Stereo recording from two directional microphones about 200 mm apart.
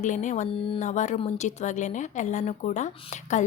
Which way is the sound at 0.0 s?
35° left (ahead or behind).